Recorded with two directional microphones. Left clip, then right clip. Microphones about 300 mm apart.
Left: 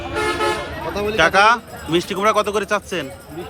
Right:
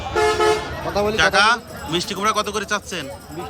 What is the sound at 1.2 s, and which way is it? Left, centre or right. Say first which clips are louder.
Speech: left 3 dB; centre.